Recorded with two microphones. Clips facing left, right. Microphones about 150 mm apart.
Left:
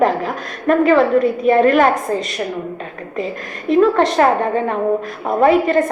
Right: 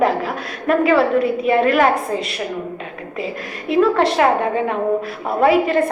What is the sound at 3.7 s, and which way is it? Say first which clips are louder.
Speech: left 2 dB; centre (ahead or behind).